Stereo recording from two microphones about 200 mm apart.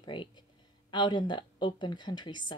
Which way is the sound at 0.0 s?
25° left (ahead or behind).